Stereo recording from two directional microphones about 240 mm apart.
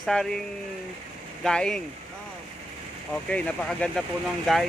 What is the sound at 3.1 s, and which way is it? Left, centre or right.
Speech, centre.